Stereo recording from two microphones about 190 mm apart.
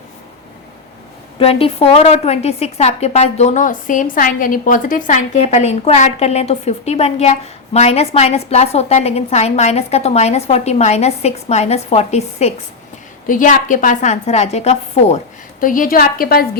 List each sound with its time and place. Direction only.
1.4 s a woman's voice: 30° left (ahead or behind)
13.2 s a woman's voice: 45° left (ahead or behind)
15.6 s a woman's voice: 45° left (ahead or behind)